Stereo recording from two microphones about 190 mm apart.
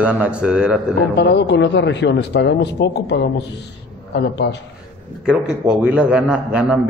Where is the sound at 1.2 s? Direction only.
65° left (ahead or behind).